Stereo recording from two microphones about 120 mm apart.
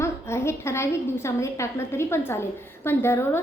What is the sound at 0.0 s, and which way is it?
A woman's voice, 20° left (ahead or behind).